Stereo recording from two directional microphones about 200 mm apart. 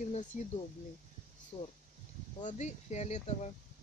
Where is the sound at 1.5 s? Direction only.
25° left (ahead or behind).